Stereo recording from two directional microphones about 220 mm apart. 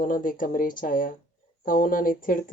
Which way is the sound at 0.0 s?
40° left (ahead or behind).